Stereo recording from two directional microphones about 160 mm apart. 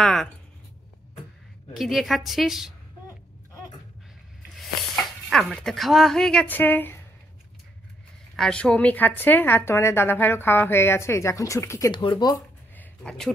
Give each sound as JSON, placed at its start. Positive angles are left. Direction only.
{"t": 0.0, "sound": "speech", "side_deg": 0}
{"t": 1.8, "sound": "a woman's voice", "side_deg": 0}
{"t": 4.6, "sound": "speech", "side_deg": 0}
{"t": 8.4, "sound": "a woman's voice", "side_deg": 5}
{"t": 11.9, "sound": "speech", "side_deg": 30}
{"t": 12.7, "sound": "a sound", "side_deg": 5}